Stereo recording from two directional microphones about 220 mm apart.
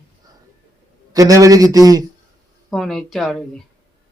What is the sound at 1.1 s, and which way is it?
Speech, 15° right (ahead or behind).